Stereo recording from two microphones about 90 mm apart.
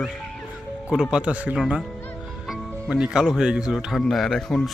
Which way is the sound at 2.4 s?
5° right (ahead or behind).